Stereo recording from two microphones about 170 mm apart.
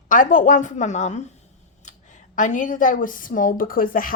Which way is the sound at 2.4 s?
50° left (ahead or behind).